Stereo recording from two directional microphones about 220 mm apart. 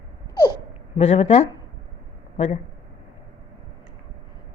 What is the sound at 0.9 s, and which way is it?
Speech, 30° left (ahead or behind).